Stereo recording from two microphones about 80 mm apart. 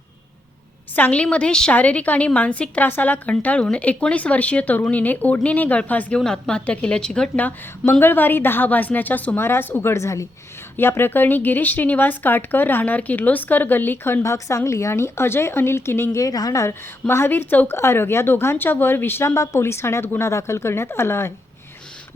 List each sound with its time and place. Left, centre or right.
0.9 s a woman's voice: centre
6.1 s a woman's voice: centre
7.9 s speech: left
14.3 s speech: left
16.2 s a woman's voice: left
17.1 s speech: left